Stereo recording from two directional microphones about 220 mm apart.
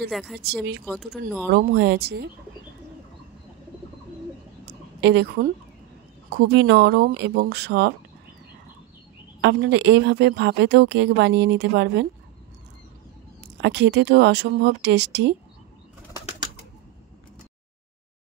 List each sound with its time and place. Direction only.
0.1 s speech: centre (ahead or behind)
0.4 s speech: 45° right (ahead or behind)
0.8 s speech: centre (ahead or behind)
1.5 s speech: 50° right (ahead or behind)
5.0 s speech: 50° right (ahead or behind)
9.4 s speech: 50° right (ahead or behind)
13.6 s speech: 50° right (ahead or behind)